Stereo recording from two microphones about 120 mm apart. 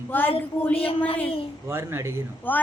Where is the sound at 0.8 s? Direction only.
55° left (ahead or behind).